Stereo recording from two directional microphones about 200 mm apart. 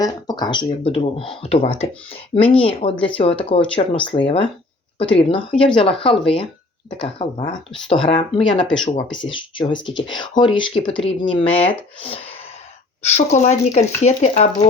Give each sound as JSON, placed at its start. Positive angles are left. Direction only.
{"t": 0.0, "sound": "speech", "side_deg": 20}
{"t": 8.6, "sound": "speech", "side_deg": 5}
{"t": 9.0, "sound": "speech", "side_deg": 25}